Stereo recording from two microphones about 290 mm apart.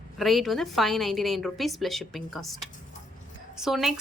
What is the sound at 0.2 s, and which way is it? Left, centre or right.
Speech, centre.